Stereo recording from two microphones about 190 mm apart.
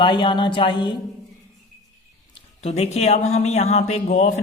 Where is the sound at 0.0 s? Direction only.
25° left (ahead or behind).